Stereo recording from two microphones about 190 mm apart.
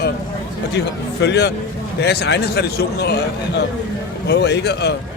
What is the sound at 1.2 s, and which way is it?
A man's voice, 65° left (ahead or behind).